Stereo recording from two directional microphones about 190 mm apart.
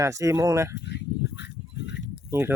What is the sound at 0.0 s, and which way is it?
Speech, 15° right (ahead or behind).